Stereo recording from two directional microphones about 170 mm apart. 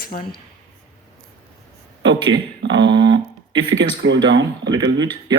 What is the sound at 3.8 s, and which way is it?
Speech, 90° right.